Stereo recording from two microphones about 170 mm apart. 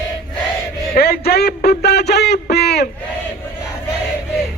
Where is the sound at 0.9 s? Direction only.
65° left (ahead or behind).